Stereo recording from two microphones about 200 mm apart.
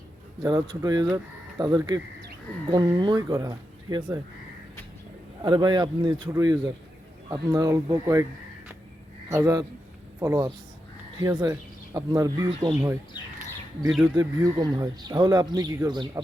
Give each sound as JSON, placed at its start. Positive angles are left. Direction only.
{"t": 0.4, "sound": "speech", "side_deg": -20}
{"t": 5.4, "sound": "speech", "side_deg": -20}
{"t": 9.3, "sound": "speech", "side_deg": -15}
{"t": 14.0, "sound": "speech", "side_deg": -15}